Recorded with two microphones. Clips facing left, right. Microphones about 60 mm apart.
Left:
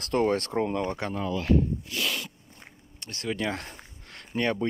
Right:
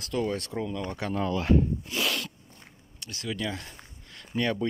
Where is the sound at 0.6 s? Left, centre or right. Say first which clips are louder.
Left 5 dB; left.